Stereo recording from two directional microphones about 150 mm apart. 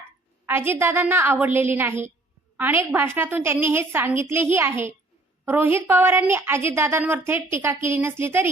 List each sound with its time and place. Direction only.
0.4 s a woman's voice: 15° right (ahead or behind)